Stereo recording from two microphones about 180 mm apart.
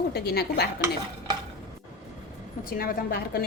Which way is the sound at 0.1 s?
60° left (ahead or behind).